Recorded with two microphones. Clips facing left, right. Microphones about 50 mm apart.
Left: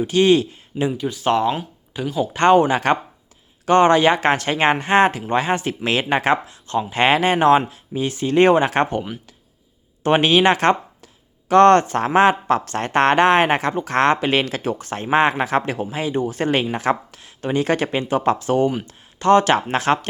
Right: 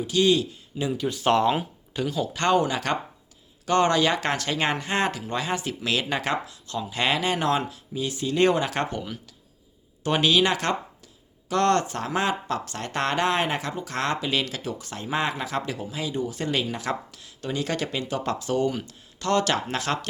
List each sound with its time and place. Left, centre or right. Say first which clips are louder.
0.0 s speech: left 6 dB; left
0.9 s speech: even; centre
1.9 s speech: left 5 dB; centre
2.3 s speech: left 9 dB; left